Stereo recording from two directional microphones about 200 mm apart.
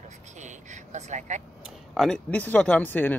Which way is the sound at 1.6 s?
Centre (ahead or behind).